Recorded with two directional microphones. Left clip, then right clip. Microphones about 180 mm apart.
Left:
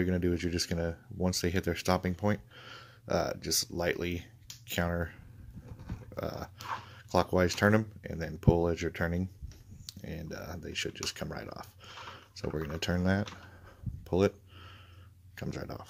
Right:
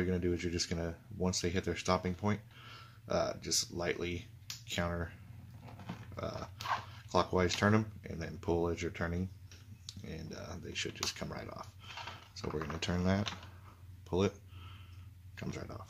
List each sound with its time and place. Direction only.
0.0 s speech: 45° left (ahead or behind)
6.1 s speech: 45° left (ahead or behind)
14.0 s a sound: 40° left (ahead or behind)
15.3 s speech: 40° left (ahead or behind)